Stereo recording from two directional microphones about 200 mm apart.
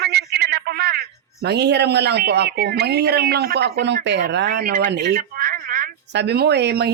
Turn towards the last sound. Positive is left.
turn(degrees=-55)  # may be behind; listen again after turning